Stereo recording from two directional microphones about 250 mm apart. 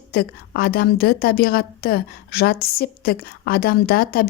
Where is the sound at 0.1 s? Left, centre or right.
Left.